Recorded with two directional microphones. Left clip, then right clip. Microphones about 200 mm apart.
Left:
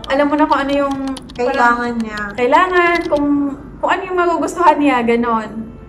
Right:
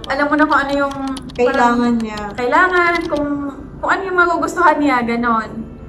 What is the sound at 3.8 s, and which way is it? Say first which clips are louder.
A woman's voice: right 1 dB; 10° left (ahead or behind).